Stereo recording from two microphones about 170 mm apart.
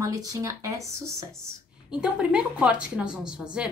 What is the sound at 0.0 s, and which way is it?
Speech, 20° right (ahead or behind).